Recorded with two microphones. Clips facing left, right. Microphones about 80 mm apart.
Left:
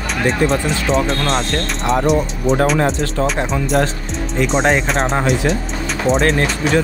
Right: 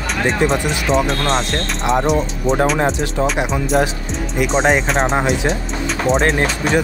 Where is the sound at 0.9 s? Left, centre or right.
Centre.